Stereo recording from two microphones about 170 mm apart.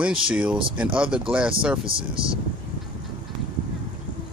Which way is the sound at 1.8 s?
30° right (ahead or behind).